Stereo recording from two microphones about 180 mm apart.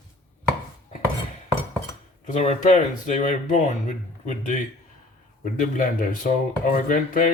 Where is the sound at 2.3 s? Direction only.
40° left (ahead or behind).